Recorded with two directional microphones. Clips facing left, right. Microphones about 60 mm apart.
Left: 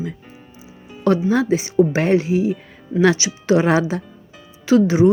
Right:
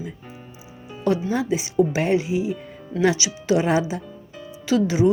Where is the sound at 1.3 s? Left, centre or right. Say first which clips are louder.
Left 5 dB; left.